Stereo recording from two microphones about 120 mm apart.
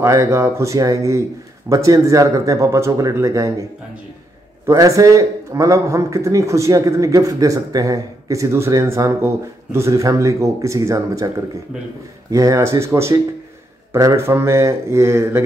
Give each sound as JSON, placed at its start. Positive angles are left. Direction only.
{"t": 0.0, "sound": "a man's voice", "side_deg": -25}
{"t": 4.6, "sound": "a man's voice", "side_deg": -25}